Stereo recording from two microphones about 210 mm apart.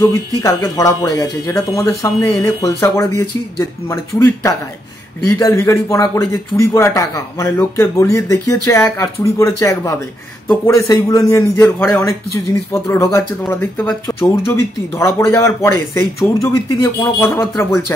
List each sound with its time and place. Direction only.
0.4 s speech: 15° left (ahead or behind)
4.2 s speech: 15° left (ahead or behind)